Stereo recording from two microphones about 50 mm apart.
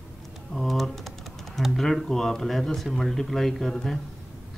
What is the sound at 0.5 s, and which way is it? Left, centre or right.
Typing, centre.